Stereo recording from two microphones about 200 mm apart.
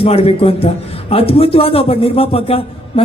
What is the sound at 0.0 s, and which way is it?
A man's voice, 30° left (ahead or behind).